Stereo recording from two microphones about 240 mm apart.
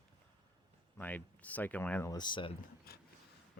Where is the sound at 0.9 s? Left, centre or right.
Centre.